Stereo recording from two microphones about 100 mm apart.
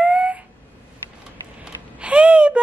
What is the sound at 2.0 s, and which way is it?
Speech, 10° right (ahead or behind).